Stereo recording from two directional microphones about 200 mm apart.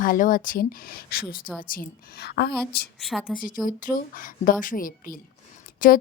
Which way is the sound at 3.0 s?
Centre (ahead or behind).